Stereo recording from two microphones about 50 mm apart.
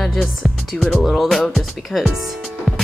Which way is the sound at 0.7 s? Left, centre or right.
Centre.